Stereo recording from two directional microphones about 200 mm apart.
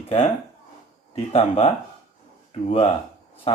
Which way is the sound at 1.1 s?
30° left (ahead or behind).